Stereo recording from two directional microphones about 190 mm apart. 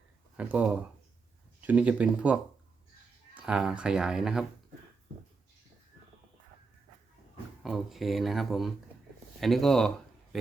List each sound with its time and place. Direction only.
0.3 s speech: 5° right (ahead or behind)
7.6 s speech: centre (ahead or behind)